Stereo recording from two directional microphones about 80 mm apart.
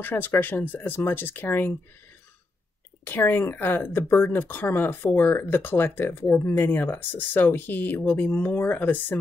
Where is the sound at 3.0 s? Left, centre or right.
Left.